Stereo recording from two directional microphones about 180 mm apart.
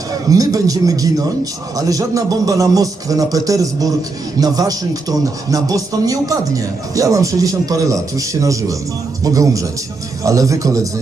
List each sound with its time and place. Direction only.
0.1 s speech: 20° right (ahead or behind)